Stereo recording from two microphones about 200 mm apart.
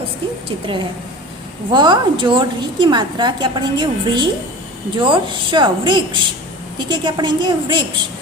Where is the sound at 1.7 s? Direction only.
25° right (ahead or behind).